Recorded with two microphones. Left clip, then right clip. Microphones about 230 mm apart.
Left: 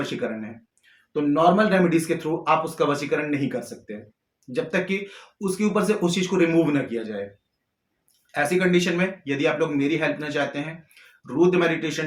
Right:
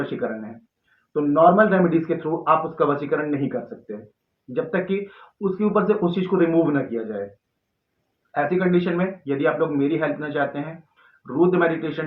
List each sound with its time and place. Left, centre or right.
0.0 s a man's voice: left
5.4 s a man's voice: left
8.3 s a man's voice: left